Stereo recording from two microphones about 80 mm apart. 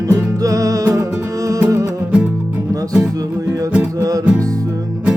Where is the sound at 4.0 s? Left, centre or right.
Right.